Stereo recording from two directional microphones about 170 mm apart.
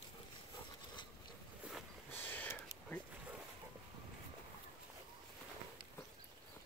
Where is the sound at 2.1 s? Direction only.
10° left (ahead or behind).